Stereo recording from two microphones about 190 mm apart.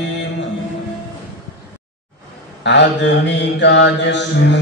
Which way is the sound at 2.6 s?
65° left (ahead or behind).